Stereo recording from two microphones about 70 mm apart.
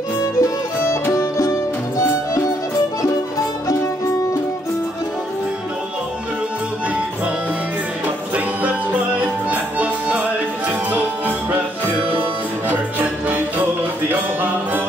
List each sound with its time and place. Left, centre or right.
0.2 s music: left
9.2 s music: centre
12.6 s music: right